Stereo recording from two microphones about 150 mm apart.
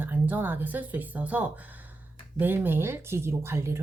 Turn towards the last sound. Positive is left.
turn(degrees=-20)  # may be behind; listen again after turning